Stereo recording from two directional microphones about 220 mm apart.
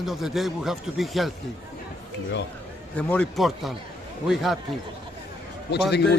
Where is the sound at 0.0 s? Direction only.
Centre (ahead or behind).